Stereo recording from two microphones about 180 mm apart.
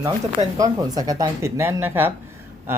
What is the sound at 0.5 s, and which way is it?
Speech, 20° right (ahead or behind).